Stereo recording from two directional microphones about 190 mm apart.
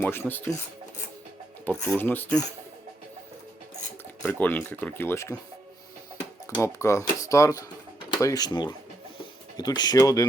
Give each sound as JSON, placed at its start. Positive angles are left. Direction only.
{"t": 0.0, "sound": "speech", "side_deg": 10}
{"t": 1.6, "sound": "speech", "side_deg": 5}
{"t": 4.2, "sound": "speech", "side_deg": 10}
{"t": 6.6, "sound": "speech", "side_deg": 15}